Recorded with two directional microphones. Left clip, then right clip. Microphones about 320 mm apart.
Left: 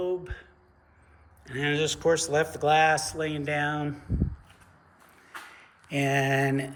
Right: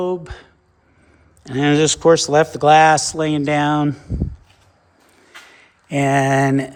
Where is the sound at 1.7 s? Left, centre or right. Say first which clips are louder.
Right 12 dB; right.